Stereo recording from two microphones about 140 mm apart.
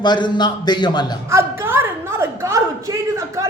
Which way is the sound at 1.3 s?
15° right (ahead or behind).